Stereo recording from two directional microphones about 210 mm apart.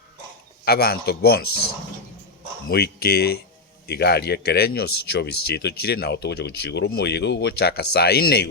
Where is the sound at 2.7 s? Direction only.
50° left (ahead or behind).